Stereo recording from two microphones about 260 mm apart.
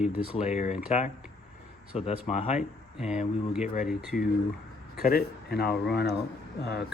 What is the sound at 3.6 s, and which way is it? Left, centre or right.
Speech, left.